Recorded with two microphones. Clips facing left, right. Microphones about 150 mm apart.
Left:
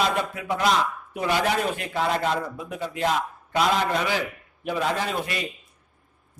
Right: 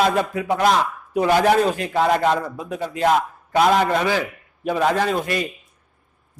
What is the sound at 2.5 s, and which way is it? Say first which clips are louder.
A man's voice: right 4 dB; 45° right (ahead or behind).